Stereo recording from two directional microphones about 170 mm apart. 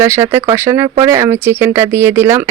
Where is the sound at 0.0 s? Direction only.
15° right (ahead or behind).